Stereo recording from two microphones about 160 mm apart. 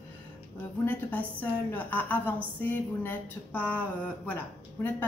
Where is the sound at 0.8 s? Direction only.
10° left (ahead or behind).